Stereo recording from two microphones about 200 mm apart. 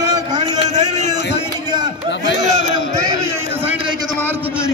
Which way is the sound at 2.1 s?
60° left (ahead or behind).